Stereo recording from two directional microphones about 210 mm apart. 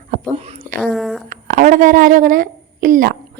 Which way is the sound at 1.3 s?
40° right (ahead or behind).